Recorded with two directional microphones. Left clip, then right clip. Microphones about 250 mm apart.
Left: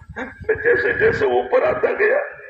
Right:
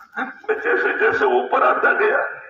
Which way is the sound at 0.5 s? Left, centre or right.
Centre.